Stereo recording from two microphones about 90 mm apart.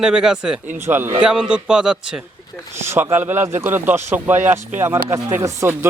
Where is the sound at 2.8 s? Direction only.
30° right (ahead or behind).